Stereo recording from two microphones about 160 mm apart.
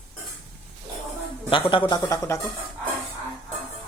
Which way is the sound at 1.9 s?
20° left (ahead or behind).